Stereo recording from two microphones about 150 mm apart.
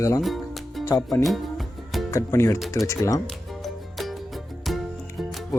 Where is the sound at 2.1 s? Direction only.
20° left (ahead or behind).